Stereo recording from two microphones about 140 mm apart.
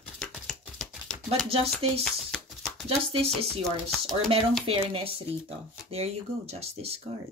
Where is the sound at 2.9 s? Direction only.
45° right (ahead or behind).